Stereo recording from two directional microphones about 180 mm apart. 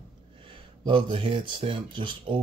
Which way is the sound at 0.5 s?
25° right (ahead or behind).